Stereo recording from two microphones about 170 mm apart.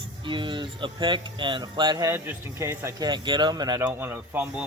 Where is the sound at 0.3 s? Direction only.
30° right (ahead or behind).